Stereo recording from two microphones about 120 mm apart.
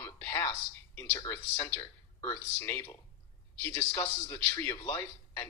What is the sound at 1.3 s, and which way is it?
Speech, 20° left (ahead or behind).